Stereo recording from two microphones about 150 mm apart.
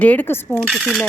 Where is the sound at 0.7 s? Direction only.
Centre (ahead or behind).